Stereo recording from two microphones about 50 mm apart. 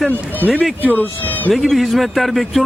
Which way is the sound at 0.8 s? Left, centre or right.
Left.